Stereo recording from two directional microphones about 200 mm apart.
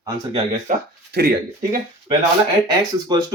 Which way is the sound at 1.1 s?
50° right (ahead or behind).